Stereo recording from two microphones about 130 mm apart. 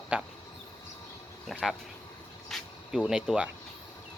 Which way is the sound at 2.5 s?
5° right (ahead or behind).